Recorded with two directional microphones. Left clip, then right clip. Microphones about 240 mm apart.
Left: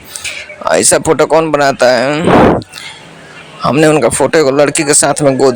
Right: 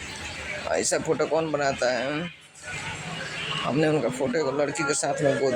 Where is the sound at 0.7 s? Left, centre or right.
Left.